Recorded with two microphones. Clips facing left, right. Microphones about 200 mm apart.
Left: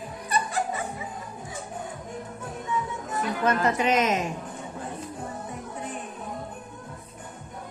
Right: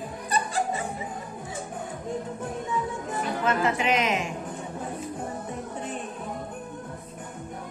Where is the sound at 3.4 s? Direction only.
40° left (ahead or behind).